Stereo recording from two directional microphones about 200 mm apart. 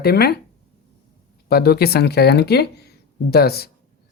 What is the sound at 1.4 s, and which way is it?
Speech, 50° left (ahead or behind).